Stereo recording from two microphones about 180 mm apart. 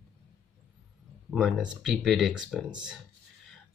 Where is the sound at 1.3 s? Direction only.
Centre (ahead or behind).